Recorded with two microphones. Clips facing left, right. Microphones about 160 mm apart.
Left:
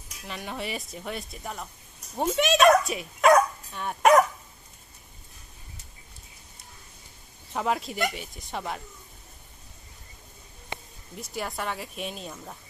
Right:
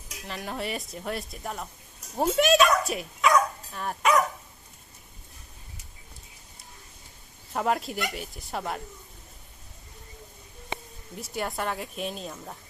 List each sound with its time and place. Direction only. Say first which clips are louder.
0.3 s speech: right 1 dB; centre (ahead or behind)
3.2 s dog: left 4 dB; 45° left (ahead or behind)
3.7 s speech: even; centre (ahead or behind)
4.0 s speech: left 5 dB; 40° left (ahead or behind)
7.5 s speech: right 1 dB; centre (ahead or behind)
11.2 s speech: right 2 dB; centre (ahead or behind)